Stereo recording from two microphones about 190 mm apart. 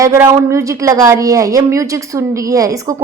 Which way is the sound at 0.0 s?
15° right (ahead or behind).